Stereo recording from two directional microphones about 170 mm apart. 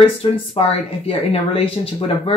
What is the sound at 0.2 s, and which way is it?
Speech, 35° left (ahead or behind).